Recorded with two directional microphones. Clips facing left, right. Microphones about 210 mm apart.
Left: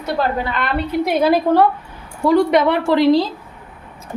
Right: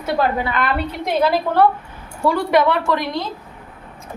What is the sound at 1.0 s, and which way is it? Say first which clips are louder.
A woman's voice: left 3 dB; 10° left (ahead or behind).